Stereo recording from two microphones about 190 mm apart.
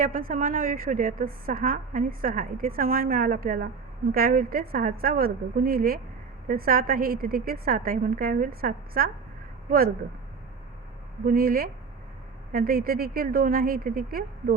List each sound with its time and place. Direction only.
0.0 s a woman's voice: 45° right (ahead or behind)
11.3 s a woman's voice: 50° right (ahead or behind)